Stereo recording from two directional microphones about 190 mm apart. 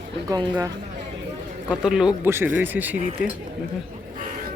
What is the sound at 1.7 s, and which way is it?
Speech, 5° right (ahead or behind).